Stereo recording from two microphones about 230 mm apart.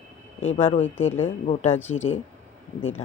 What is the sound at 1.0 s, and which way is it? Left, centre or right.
Speech, centre.